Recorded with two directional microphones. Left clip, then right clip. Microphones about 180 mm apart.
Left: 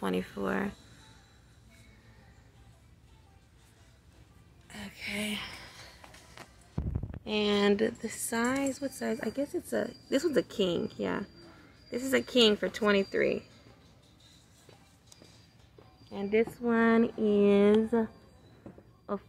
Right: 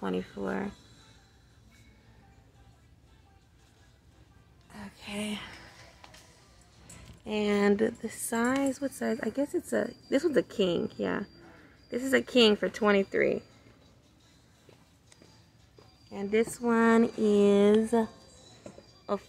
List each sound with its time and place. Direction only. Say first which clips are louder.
0.0 s speech: left 1 dB; 5° right (ahead or behind)
4.6 s a sound: left 4 dB; 10° right (ahead or behind)
7.2 s speech: even; 5° right (ahead or behind)
16.1 s speech: even; 10° right (ahead or behind)